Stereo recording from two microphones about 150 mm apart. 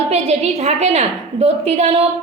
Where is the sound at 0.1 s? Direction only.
45° right (ahead or behind).